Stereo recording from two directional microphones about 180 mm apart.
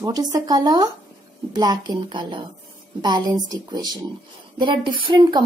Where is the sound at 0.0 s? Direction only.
20° right (ahead or behind).